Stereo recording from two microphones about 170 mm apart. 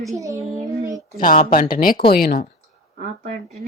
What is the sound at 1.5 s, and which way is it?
Speech, 55° left (ahead or behind).